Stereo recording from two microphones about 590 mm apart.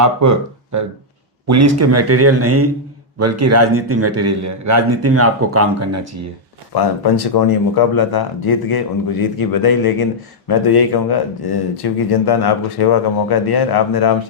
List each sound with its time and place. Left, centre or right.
0.0 s a man's voice: right
6.7 s speech: left